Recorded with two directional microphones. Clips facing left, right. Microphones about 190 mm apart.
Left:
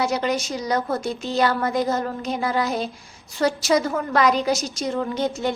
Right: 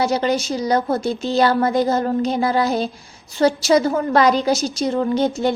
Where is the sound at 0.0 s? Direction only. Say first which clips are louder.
Right 4 dB; 30° right (ahead or behind).